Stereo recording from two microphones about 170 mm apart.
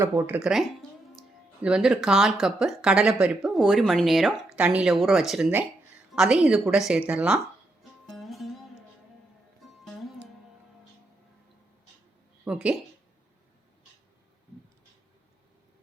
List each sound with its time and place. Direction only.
0.0 s speech: 15° right (ahead or behind)
0.4 s speech: centre (ahead or behind)
8.0 s music: centre (ahead or behind)
9.8 s music: centre (ahead or behind)
12.5 s speech: 5° right (ahead or behind)